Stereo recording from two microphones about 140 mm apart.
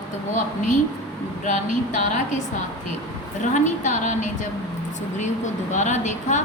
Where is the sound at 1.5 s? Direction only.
60° left (ahead or behind).